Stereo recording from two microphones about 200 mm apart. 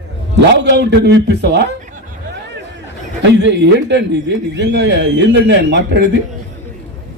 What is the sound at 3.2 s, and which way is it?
A man's voice, 60° right (ahead or behind).